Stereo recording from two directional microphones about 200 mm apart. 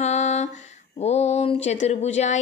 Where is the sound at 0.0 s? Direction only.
35° left (ahead or behind).